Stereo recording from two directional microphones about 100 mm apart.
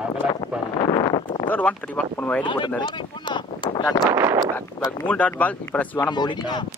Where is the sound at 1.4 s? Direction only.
15° left (ahead or behind).